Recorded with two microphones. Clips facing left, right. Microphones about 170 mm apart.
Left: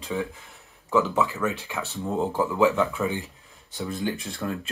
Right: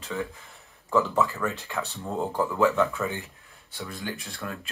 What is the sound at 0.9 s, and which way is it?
Speech, centre (ahead or behind).